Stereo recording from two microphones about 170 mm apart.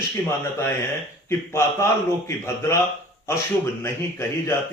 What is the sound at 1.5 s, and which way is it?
Speech, 15° left (ahead or behind).